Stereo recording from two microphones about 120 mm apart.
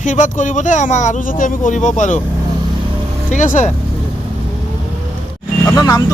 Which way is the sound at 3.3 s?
90° left.